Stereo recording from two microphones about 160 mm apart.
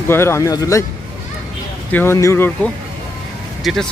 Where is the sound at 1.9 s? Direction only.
15° left (ahead or behind).